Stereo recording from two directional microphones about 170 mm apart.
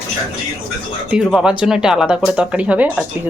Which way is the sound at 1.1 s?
5° right (ahead or behind).